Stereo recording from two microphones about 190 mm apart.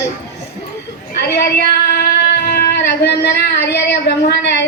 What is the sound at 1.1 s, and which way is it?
A woman's voice, 60° left (ahead or behind).